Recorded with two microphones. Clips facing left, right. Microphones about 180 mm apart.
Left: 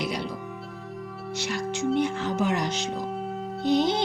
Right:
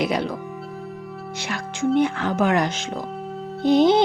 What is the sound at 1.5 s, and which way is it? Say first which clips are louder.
Speech: right 3 dB; 90° right.